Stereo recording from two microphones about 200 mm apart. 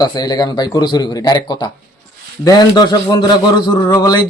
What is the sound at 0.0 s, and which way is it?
A man's voice, 20° left (ahead or behind).